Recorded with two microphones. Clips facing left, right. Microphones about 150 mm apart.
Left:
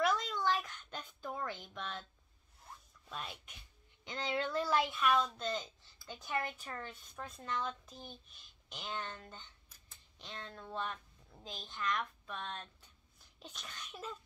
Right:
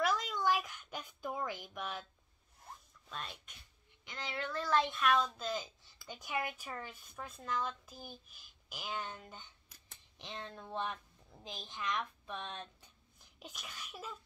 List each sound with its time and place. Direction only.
0.0 s a sound: 5° right (ahead or behind)
3.1 s speech: 5° left (ahead or behind)
4.1 s speech: 25° left (ahead or behind)
4.6 s a woman's voice: 10° left (ahead or behind); by 14.1 s 5° right (ahead or behind)